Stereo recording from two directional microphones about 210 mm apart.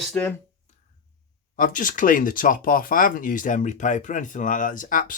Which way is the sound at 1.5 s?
40° left (ahead or behind).